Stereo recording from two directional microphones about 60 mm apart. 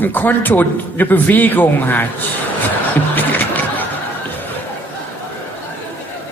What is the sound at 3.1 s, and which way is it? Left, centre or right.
Music, left.